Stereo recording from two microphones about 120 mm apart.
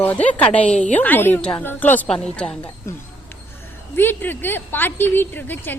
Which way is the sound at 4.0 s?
20° left (ahead or behind).